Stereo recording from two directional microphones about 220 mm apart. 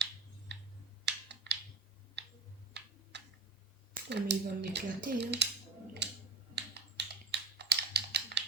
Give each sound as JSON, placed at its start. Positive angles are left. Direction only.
{"t": 0.5, "sound": "clicking", "side_deg": -50}
{"t": 1.0, "sound": "a sound", "side_deg": -50}
{"t": 2.2, "sound": "tick-tock", "side_deg": -50}
{"t": 3.9, "sound": "speech", "side_deg": -50}
{"t": 6.0, "sound": "finger snapping", "side_deg": -50}
{"t": 6.6, "sound": "typing", "side_deg": -50}